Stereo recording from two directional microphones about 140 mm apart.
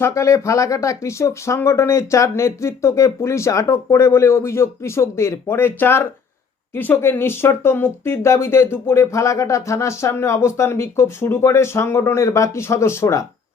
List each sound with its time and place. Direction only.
0.0 s speech: 20° left (ahead or behind)